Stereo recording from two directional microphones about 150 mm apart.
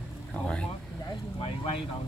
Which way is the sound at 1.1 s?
35° left (ahead or behind).